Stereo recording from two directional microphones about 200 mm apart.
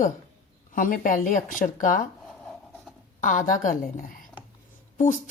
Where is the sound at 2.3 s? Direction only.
Centre (ahead or behind).